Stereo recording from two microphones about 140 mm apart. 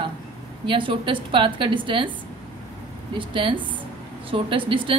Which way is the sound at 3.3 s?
35° right (ahead or behind).